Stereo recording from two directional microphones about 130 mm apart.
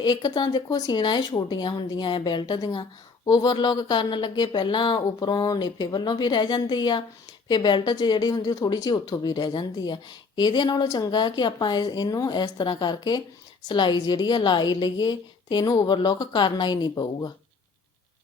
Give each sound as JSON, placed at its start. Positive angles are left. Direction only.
{"t": 0.0, "sound": "speech", "side_deg": 30}